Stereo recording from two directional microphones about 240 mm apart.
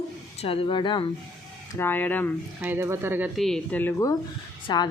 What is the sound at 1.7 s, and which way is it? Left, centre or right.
Speech, centre.